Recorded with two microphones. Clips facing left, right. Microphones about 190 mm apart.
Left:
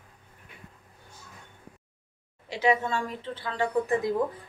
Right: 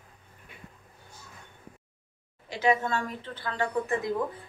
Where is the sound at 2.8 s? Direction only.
25° left (ahead or behind).